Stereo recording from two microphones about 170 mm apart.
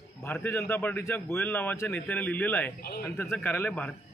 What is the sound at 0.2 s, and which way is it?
Speech, 15° left (ahead or behind).